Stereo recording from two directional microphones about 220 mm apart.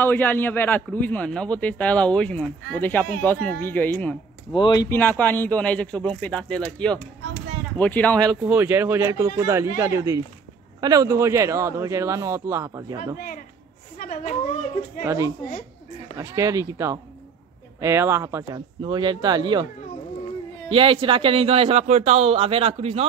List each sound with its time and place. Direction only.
0.0 s a man's voice: 10° left (ahead or behind)
4.6 s a man's voice: 20° left (ahead or behind)
8.2 s speech: 10° right (ahead or behind)
13.9 s a woman's voice: 35° left (ahead or behind)
15.0 s speech: 15° right (ahead or behind)
20.7 s a man's voice: 25° right (ahead or behind)